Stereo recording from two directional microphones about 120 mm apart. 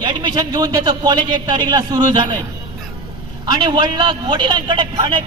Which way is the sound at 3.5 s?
40° right (ahead or behind).